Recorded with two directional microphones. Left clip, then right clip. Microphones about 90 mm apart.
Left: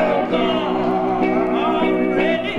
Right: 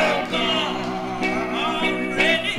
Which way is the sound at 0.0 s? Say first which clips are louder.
Left 3 dB; 20° right (ahead or behind).